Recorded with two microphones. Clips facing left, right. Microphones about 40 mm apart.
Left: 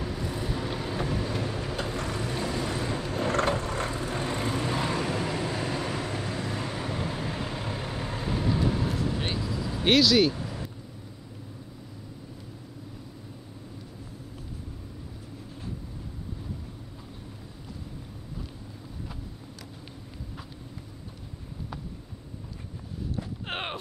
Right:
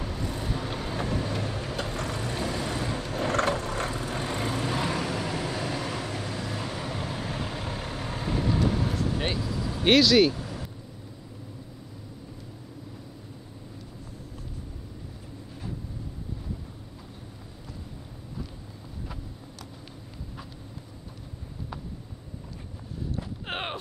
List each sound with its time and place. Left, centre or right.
0.0 s vehicle: centre
6.0 s vehicle: centre
9.8 s speech: centre
10.3 s vehicle: centre
23.1 s a sound: centre